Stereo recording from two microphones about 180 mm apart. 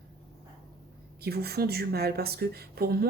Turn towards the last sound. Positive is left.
turn(degrees=-60)  # may be behind; listen again after turning